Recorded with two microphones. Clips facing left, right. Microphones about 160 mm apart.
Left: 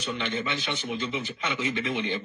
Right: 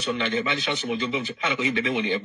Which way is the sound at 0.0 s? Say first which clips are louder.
Right 5 dB; 65° right (ahead or behind).